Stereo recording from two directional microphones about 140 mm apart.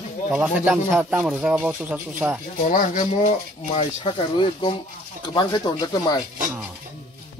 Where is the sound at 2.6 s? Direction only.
70° left (ahead or behind).